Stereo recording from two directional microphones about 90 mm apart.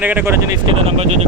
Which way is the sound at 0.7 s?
90° right.